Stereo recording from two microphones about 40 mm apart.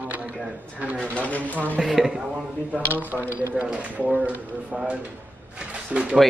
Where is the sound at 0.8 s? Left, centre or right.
Right.